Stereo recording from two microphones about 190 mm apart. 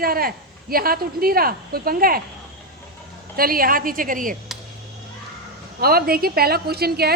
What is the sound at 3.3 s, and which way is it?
A woman's voice, 50° right (ahead or behind).